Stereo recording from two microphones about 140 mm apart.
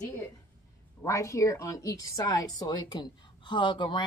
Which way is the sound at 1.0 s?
20° left (ahead or behind).